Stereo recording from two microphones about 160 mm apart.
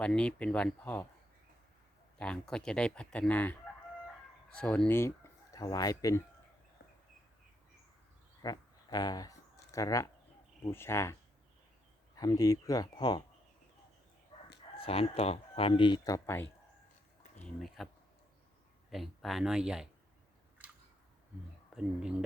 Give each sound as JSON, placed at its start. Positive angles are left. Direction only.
{"t": 0.0, "sound": "speech", "side_deg": 5}
{"t": 2.1, "sound": "speech", "side_deg": 5}
{"t": 4.5, "sound": "speech", "side_deg": 5}
{"t": 8.4, "sound": "a sound", "side_deg": 25}
{"t": 9.7, "sound": "speech", "side_deg": 20}
{"t": 14.8, "sound": "speech", "side_deg": 35}
{"t": 17.4, "sound": "speech", "side_deg": 0}
{"t": 18.9, "sound": "speech", "side_deg": 0}
{"t": 21.7, "sound": "speech", "side_deg": -5}